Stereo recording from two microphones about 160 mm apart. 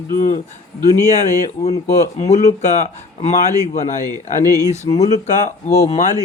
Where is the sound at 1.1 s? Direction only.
45° left (ahead or behind).